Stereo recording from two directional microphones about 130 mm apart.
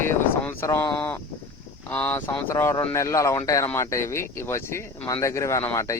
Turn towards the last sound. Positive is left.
turn(degrees=20)  # may be behind; listen again after turning